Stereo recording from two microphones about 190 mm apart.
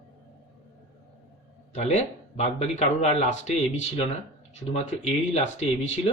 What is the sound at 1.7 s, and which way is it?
Speech, 35° left (ahead or behind).